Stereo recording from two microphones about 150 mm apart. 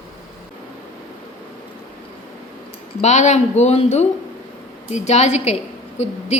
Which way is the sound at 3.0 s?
50° left (ahead or behind).